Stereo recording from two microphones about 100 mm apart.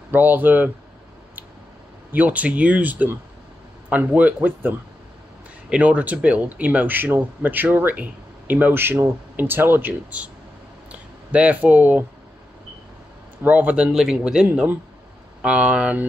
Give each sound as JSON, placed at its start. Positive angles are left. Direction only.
{"t": 0.1, "sound": "speech", "side_deg": -20}
{"t": 2.1, "sound": "speech", "side_deg": -15}
{"t": 13.4, "sound": "speech", "side_deg": -15}